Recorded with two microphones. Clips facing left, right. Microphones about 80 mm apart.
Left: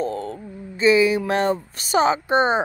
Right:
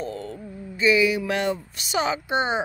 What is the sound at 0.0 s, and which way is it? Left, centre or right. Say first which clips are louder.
Speech: left 6 dB; left.